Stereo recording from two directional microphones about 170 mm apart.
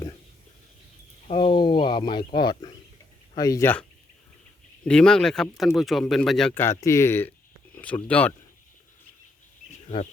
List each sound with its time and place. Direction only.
1.3 s a sound: 35° left (ahead or behind)
3.3 s speech: 20° left (ahead or behind)
4.9 s speech: 5° left (ahead or behind)
6.5 s speech: 15° left (ahead or behind)